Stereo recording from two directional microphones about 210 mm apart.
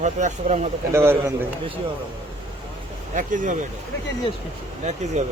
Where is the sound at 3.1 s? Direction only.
35° right (ahead or behind).